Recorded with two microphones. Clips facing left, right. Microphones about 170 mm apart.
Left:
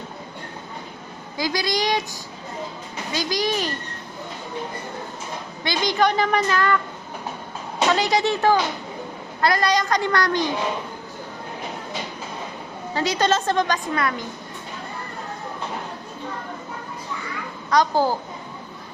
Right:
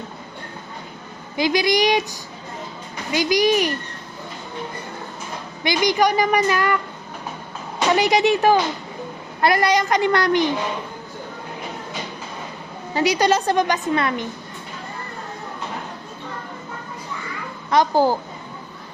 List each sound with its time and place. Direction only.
1.4 s a woman's voice: 20° right (ahead or behind)
3.1 s a woman's voice: 15° right (ahead or behind)
5.6 s a woman's voice: 15° right (ahead or behind)
7.9 s a woman's voice: 20° right (ahead or behind)
12.9 s a woman's voice: 15° right (ahead or behind)
17.7 s a woman's voice: 15° right (ahead or behind)